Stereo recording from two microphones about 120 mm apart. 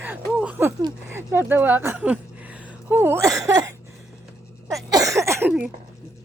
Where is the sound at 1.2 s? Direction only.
15° right (ahead or behind).